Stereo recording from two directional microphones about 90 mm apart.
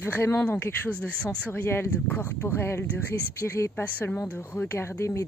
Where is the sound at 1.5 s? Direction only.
25° left (ahead or behind).